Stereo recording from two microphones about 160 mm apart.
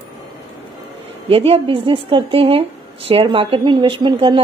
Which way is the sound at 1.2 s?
35° right (ahead or behind).